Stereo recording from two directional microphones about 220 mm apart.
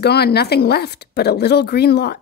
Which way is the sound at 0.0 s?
45° left (ahead or behind).